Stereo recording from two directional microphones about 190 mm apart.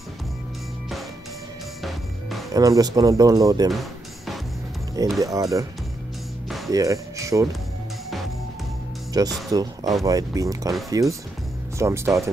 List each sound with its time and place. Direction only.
2.5 s speech: 20° right (ahead or behind)
5.2 s speech: 15° right (ahead or behind)
6.7 s speech: 15° right (ahead or behind)
9.1 s speech: 20° right (ahead or behind)